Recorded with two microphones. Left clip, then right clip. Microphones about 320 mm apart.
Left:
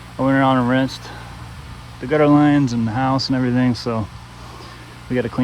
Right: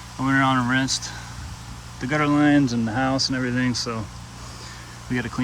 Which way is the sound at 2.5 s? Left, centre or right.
Centre.